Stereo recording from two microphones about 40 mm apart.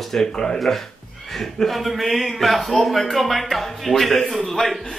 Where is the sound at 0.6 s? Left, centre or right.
Centre.